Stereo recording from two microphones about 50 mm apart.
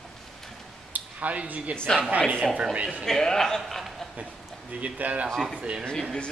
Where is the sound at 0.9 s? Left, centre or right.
Right.